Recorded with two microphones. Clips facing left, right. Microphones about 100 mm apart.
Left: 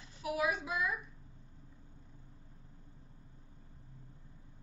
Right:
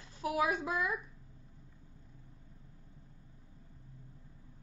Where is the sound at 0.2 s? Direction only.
40° right (ahead or behind).